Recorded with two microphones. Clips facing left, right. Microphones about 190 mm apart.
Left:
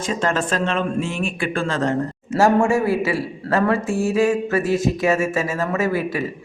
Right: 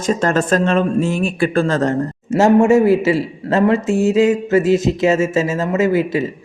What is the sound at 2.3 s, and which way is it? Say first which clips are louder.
A man's voice: right 5 dB; 20° right (ahead or behind).